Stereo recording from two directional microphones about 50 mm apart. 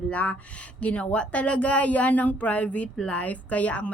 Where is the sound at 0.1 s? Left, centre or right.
Left.